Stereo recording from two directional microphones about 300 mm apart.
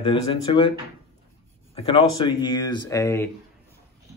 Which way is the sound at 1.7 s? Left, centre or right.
Centre.